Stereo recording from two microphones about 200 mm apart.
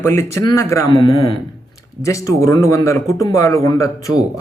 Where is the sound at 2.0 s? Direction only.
15° left (ahead or behind).